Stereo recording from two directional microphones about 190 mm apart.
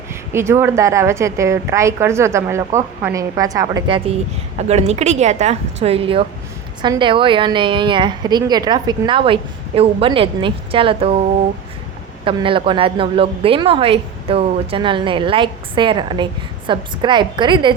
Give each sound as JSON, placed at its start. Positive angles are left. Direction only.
{"t": 0.3, "sound": "a woman's voice", "side_deg": -15}
{"t": 4.5, "sound": "a woman's voice", "side_deg": -35}